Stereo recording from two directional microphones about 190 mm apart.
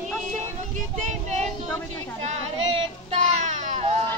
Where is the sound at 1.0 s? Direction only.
40° right (ahead or behind).